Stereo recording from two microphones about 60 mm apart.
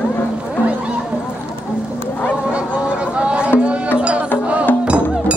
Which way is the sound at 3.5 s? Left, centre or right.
Centre.